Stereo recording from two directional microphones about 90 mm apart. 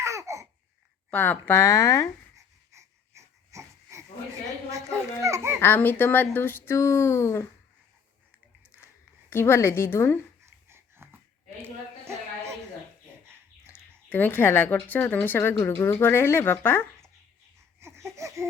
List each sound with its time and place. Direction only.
0.0 s a sound: 35° right (ahead or behind)
1.1 s speech: 20° left (ahead or behind)
2.3 s wheeze: 35° right (ahead or behind)
5.2 s a child's voice: 35° right (ahead or behind)
5.5 s speech: 20° left (ahead or behind)
9.3 s speech: 25° left (ahead or behind)
10.4 s a sound: 30° right (ahead or behind)
14.1 s speech: 20° left (ahead or behind)
17.7 s laughter: 30° right (ahead or behind)